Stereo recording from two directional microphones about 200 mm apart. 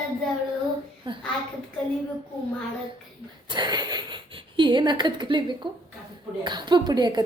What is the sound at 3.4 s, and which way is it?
A woman's voice, 20° right (ahead or behind).